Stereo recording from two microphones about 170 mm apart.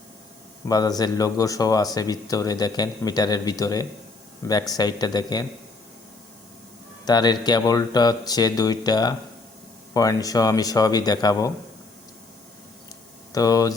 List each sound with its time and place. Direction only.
0.7 s speech: 20° left (ahead or behind)
7.0 s speech: 25° left (ahead or behind)
13.3 s speech: 20° left (ahead or behind)